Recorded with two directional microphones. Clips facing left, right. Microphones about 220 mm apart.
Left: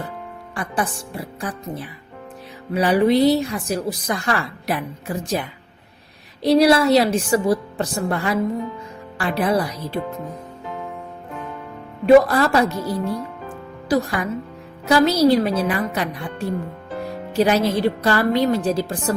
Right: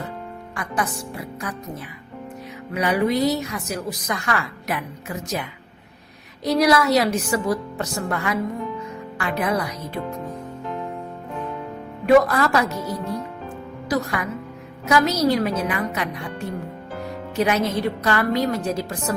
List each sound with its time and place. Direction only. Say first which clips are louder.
0.5 s a woman's voice: left 2 dB; 30° left (ahead or behind)
6.4 s a woman's voice: left 4 dB; 30° left (ahead or behind)
12.0 s a woman's voice: left 3 dB; 30° left (ahead or behind)